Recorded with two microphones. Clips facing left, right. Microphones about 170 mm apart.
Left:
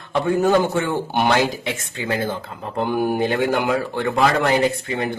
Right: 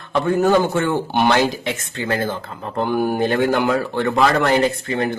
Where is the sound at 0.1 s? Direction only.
10° left (ahead or behind).